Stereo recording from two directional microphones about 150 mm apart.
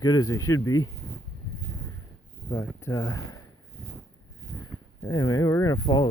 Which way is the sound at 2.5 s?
20° left (ahead or behind).